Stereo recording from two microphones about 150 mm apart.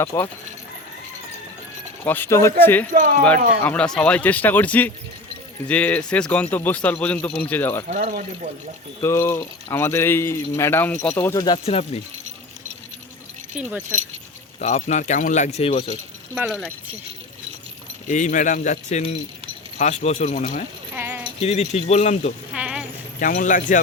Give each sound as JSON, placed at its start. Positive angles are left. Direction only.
{"t": 0.0, "sound": "speech", "side_deg": 20}
{"t": 2.0, "sound": "a man's voice", "side_deg": 15}
{"t": 7.9, "sound": "speech", "side_deg": -60}
{"t": 9.0, "sound": "a man's voice", "side_deg": 20}
{"t": 11.6, "sound": "speech", "side_deg": 40}
{"t": 13.6, "sound": "speech", "side_deg": -10}
{"t": 14.6, "sound": "speech", "side_deg": 50}
{"t": 16.5, "sound": "speech", "side_deg": 0}
{"t": 18.1, "sound": "a man's voice", "side_deg": 55}
{"t": 20.9, "sound": "a sound", "side_deg": -15}
{"t": 21.4, "sound": "speech", "side_deg": 45}
{"t": 22.5, "sound": "a sound", "side_deg": -5}
{"t": 23.2, "sound": "a man's voice", "side_deg": 60}